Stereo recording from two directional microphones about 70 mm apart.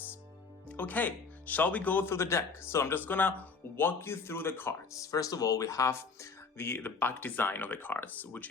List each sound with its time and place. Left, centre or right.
0.7 s speech: left
2.0 s speech: left
3.1 s speech: left
4.9 s speech: left
6.6 s speech: left